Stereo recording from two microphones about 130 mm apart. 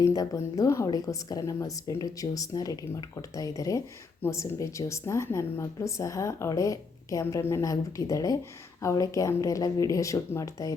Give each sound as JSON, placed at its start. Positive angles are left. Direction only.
{"t": 0.0, "sound": "a woman's voice", "side_deg": 25}